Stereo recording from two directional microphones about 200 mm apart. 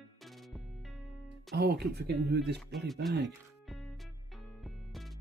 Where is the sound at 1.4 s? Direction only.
55° right (ahead or behind).